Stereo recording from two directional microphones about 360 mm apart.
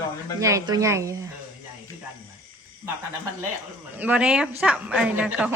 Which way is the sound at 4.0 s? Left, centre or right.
Centre.